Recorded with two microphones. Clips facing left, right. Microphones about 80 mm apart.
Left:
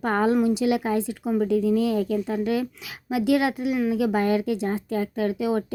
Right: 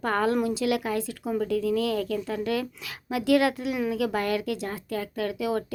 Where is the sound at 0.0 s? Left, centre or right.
Centre.